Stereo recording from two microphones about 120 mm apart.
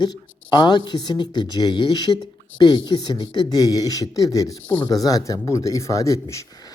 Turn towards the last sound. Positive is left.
turn(degrees=30)  # may be behind; listen again after turning